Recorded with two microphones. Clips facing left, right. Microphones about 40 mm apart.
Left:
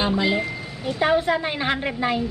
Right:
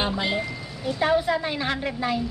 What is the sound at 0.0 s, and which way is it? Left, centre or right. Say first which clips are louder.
Speech: left 4 dB; centre.